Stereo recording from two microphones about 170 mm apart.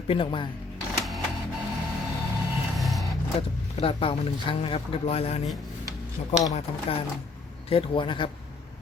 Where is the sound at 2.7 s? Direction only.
Centre (ahead or behind).